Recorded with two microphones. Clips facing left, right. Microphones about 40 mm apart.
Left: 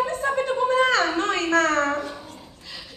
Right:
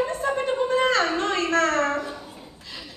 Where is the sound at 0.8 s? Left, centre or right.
Left.